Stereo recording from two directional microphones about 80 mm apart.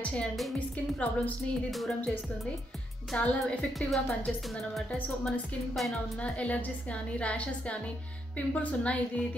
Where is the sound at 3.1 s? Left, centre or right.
Centre.